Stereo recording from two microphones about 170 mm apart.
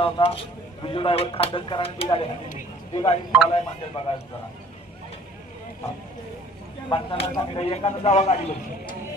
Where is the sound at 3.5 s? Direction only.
35° left (ahead or behind).